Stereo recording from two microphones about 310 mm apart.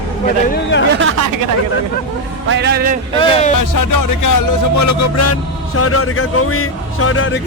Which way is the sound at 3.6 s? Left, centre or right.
Left.